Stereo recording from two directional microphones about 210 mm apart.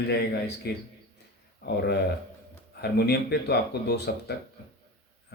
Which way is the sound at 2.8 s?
50° left (ahead or behind).